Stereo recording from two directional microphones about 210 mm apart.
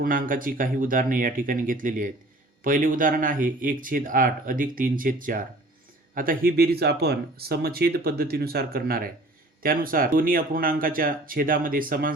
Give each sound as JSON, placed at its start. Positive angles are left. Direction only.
{"t": 0.0, "sound": "speech", "side_deg": -40}